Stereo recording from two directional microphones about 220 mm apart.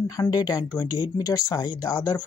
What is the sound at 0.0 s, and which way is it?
Speech, 15° left (ahead or behind).